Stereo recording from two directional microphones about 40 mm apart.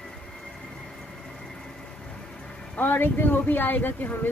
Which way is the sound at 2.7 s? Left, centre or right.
Left.